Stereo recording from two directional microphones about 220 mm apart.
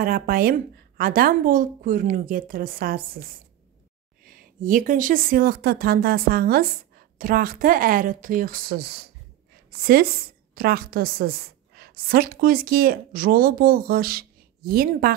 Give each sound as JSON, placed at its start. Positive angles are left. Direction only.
{"t": 0.0, "sound": "a woman's voice", "side_deg": -40}